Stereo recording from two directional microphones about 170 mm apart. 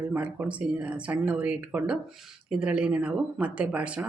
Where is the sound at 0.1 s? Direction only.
10° right (ahead or behind).